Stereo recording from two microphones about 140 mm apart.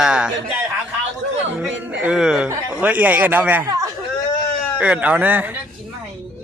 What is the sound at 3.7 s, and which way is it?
Speech, 25° right (ahead or behind).